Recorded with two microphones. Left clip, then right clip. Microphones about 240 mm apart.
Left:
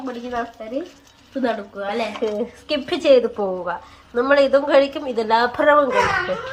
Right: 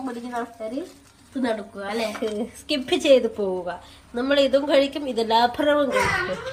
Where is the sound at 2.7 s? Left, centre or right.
Centre.